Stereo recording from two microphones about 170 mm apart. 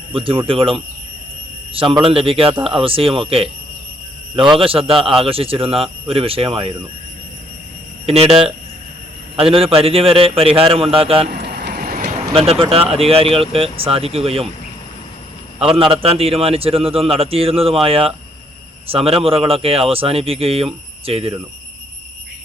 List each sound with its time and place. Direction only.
0.1 s a man's voice: 30° right (ahead or behind)
2.0 s a man's voice: 35° right (ahead or behind)
4.5 s a man's voice: 30° right (ahead or behind)
8.0 s a man's voice: 35° right (ahead or behind)
11.3 s vehicle: 75° right (ahead or behind)
12.0 s a man's voice: 35° right (ahead or behind)
15.6 s a man's voice: 30° right (ahead or behind)